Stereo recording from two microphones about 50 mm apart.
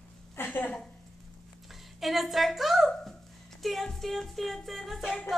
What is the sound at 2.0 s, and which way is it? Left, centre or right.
A woman's voice, centre.